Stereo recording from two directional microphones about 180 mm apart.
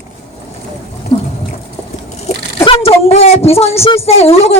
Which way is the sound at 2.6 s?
30° left (ahead or behind).